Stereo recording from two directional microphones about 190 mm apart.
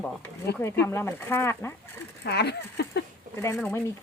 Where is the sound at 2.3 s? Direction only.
60° left (ahead or behind).